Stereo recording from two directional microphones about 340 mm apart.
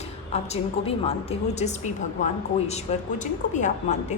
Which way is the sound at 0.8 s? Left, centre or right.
Centre.